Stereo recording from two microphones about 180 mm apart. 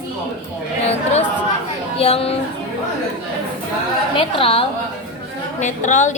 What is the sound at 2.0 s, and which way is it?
Speech, 35° left (ahead or behind).